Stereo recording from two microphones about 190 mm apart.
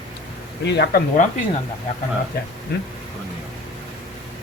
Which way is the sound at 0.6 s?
65° left (ahead or behind).